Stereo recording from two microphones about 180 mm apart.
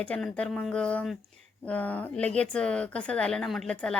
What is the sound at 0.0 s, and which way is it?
Speech, 5° left (ahead or behind).